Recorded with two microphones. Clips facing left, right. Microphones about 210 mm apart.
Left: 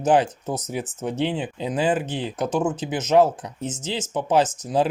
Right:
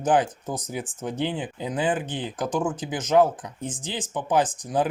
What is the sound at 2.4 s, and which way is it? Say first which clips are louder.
Speech: left 3 dB; 25° left (ahead or behind).